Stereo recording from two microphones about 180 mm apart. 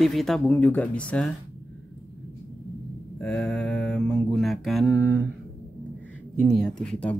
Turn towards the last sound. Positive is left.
turn(degrees=5)  # may be behind; listen again after turning